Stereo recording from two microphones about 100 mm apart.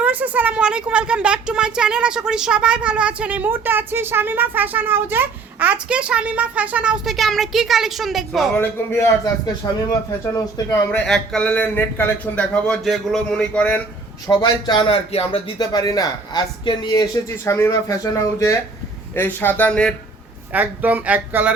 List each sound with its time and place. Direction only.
0.0 s a woman's voice: 15° right (ahead or behind); by 8.4 s centre (ahead or behind)
8.5 s speech: 20° left (ahead or behind)
9.6 s a man's voice: 45° left (ahead or behind)
11.0 s a man's voice: 5° left (ahead or behind)
12.6 s a man's voice: 5° left (ahead or behind)
14.3 s a man's voice: 50° left (ahead or behind)
15.1 s speech: 80° left
15.5 s speech: 40° left (ahead or behind)
17.2 s speech: 30° left (ahead or behind)
19.1 s speech: 20° left (ahead or behind)
20.5 s a woman's voice: 15° right (ahead or behind)